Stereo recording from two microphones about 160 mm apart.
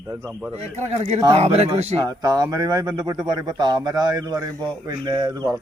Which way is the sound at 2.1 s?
20° right (ahead or behind).